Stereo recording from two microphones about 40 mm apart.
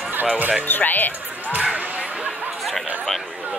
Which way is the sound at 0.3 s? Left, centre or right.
Right.